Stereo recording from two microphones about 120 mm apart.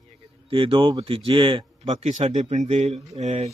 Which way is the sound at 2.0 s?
75° right (ahead or behind).